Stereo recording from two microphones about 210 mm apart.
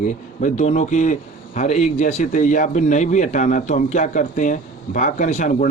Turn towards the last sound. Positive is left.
turn(degrees=35)  # may be behind; listen again after turning